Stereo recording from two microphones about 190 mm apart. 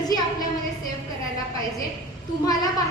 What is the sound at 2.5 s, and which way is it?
Speech, 20° left (ahead or behind).